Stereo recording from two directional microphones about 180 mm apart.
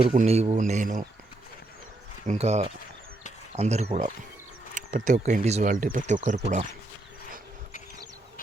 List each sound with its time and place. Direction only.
0.1 s speech: 35° right (ahead or behind)
2.2 s speech: 40° right (ahead or behind)